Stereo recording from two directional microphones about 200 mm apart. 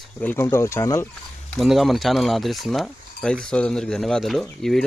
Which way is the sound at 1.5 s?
Centre (ahead or behind).